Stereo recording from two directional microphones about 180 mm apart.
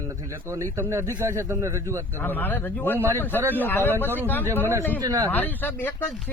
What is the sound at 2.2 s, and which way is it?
Speech, 10° left (ahead or behind).